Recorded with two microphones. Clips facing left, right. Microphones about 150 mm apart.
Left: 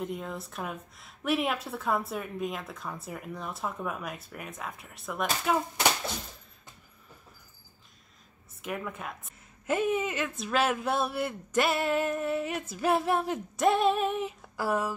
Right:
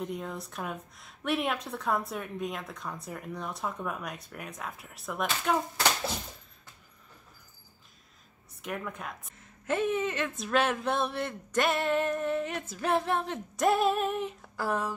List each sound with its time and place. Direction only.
0.0 s a woman's voice: centre (ahead or behind)
8.6 s a woman's voice: centre (ahead or behind)